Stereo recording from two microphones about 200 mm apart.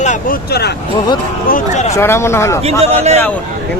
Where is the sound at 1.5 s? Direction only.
40° left (ahead or behind).